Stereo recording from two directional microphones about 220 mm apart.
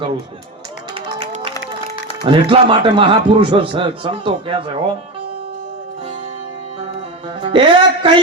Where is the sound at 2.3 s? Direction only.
25° right (ahead or behind).